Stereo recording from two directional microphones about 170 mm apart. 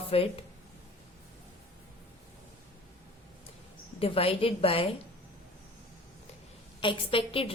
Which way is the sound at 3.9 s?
35° left (ahead or behind).